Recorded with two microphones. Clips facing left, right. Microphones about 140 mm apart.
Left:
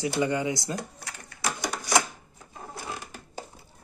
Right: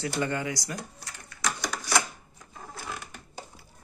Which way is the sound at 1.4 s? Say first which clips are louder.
Left 1 dB; 20° left (ahead or behind).